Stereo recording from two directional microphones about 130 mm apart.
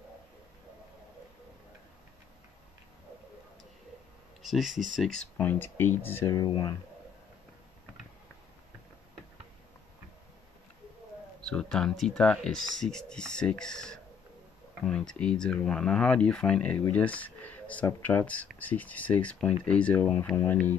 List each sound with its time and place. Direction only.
4.4 s speech: centre (ahead or behind); by 6.3 s 15° left (ahead or behind)
6.3 s speech: 30° left (ahead or behind)
11.4 s speech: 5° left (ahead or behind)